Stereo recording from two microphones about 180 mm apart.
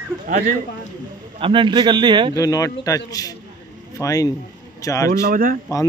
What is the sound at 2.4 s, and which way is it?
A man's voice, 20° left (ahead or behind).